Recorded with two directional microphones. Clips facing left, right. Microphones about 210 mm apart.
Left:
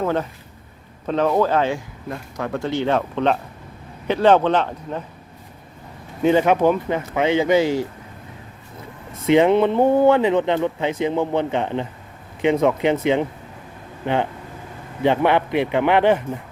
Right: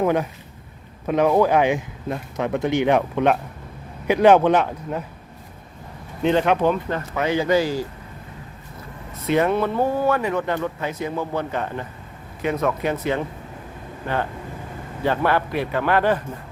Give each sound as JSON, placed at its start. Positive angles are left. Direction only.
{"t": 0.0, "sound": "speech", "side_deg": -15}
{"t": 6.2, "sound": "speech", "side_deg": 10}
{"t": 7.2, "sound": "speech", "side_deg": 20}
{"t": 9.2, "sound": "speech", "side_deg": 20}